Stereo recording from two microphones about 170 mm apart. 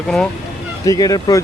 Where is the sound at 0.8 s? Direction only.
20° left (ahead or behind).